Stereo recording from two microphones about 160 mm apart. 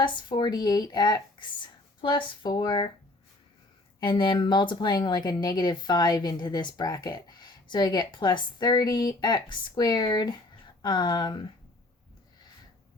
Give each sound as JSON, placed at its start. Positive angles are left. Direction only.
{"t": 0.0, "sound": "a woman's voice", "side_deg": 30}
{"t": 4.0, "sound": "a woman's voice", "side_deg": 30}